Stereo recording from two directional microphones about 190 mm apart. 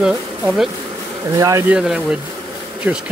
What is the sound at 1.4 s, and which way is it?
Speech, 15° right (ahead or behind).